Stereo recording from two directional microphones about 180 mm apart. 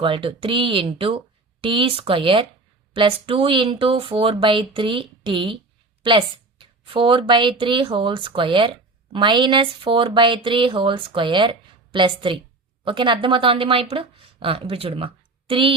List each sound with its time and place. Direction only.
0.0 s speech: 30° right (ahead or behind)